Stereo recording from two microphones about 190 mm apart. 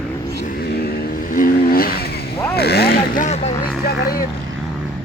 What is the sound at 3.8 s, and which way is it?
Speech, 50° left (ahead or behind).